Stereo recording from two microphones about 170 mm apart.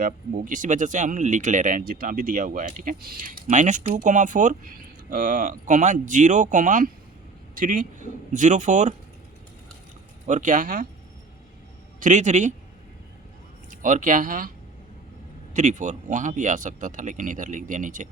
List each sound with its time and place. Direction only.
0.0 s speech: 50° right (ahead or behind)
10.2 s speech: 45° right (ahead or behind)
11.9 s speech: 45° right (ahead or behind)
13.7 s speech: 50° right (ahead or behind)
15.5 s speech: 45° right (ahead or behind)